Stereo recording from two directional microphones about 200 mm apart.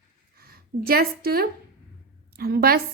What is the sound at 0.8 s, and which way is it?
A woman's voice, 50° right (ahead or behind).